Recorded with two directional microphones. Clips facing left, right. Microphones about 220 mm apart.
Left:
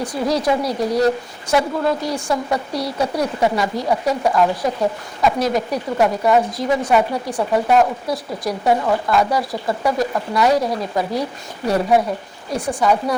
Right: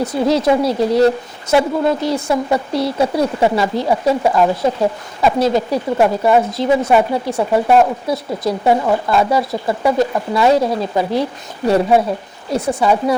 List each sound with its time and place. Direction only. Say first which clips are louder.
0.0 s a woman's voice: right 5 dB; 25° right (ahead or behind)
12.5 s a woman's voice: right 3 dB; 25° right (ahead or behind)